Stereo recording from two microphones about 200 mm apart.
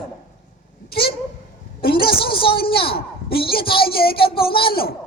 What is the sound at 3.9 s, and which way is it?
Speech, 50° left (ahead or behind).